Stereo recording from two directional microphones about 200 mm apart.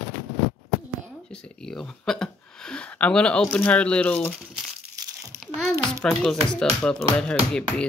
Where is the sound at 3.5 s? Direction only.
5° left (ahead or behind).